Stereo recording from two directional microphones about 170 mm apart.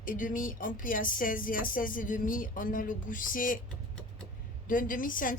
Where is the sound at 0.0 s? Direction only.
55° left (ahead or behind).